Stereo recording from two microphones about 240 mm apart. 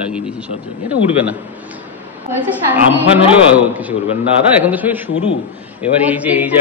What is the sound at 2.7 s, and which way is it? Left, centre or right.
A man's voice, centre.